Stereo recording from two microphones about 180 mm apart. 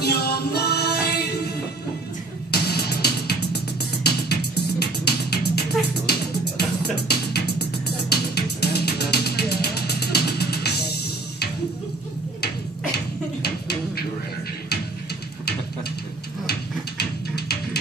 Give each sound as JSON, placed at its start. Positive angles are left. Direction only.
{"t": 0.0, "sound": "music", "side_deg": 60}
{"t": 2.5, "sound": "music", "side_deg": 65}
{"t": 13.4, "sound": "a sound", "side_deg": 60}